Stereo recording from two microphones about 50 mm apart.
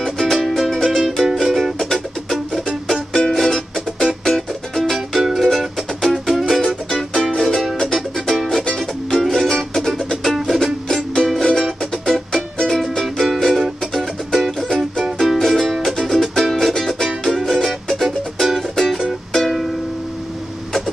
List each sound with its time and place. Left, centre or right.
0.0 s music: centre
7.4 s music: centre
8.6 s music: centre
9.1 s music: centre